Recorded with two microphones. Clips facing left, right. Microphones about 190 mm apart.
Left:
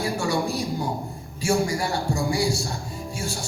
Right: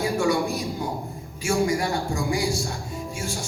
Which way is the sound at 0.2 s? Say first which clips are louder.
Right 4 dB; 30° left (ahead or behind).